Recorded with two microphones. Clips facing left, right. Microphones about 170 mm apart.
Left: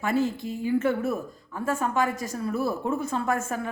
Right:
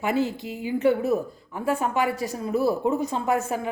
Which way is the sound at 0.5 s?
15° right (ahead or behind).